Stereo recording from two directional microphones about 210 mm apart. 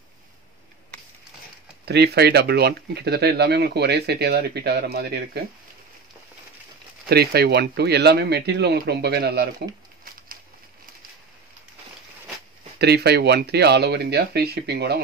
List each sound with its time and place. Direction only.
1.9 s speech: 50° right (ahead or behind)
7.1 s speech: 50° right (ahead or behind)
12.7 s speech: 50° right (ahead or behind)